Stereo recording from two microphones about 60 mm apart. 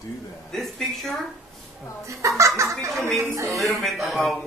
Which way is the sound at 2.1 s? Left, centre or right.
Right.